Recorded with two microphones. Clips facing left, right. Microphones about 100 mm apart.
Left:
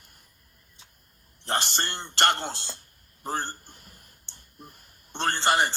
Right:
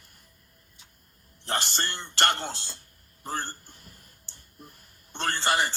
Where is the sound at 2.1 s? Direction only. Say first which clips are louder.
Left 2 dB; 50° left (ahead or behind).